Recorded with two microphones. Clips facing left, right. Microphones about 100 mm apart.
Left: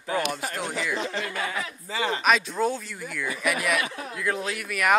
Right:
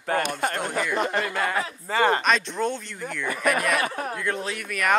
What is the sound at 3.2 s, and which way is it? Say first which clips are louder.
Speech: right 4 dB; 50° right (ahead or behind).